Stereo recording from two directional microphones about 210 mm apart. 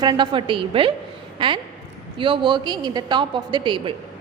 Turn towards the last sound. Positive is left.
turn(degrees=-25)  # may be behind; listen again after turning